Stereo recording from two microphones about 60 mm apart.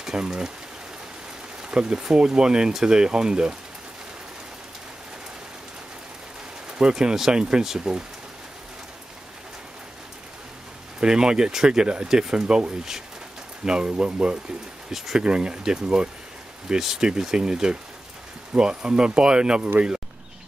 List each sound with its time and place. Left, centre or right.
0.0 s speech: centre
1.6 s speech: centre
6.8 s speech: centre
11.0 s speech: centre
14.9 s speech: centre